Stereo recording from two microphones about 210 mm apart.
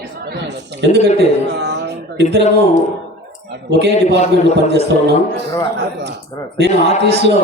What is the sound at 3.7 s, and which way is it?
Speech, 55° right (ahead or behind).